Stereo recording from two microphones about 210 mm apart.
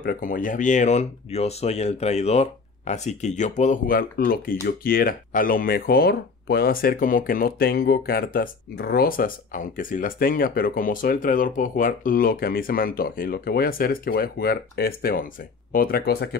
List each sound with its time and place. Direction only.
0.0 s speech: 40° left (ahead or behind)